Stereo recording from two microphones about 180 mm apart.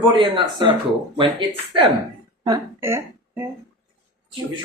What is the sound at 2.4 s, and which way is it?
Speech, 15° right (ahead or behind).